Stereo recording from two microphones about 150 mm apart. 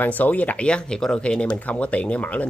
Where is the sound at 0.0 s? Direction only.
10° left (ahead or behind).